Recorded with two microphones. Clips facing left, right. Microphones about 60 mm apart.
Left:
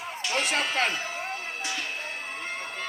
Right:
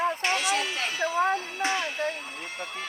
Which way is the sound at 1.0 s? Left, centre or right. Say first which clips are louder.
Right 9 dB; right.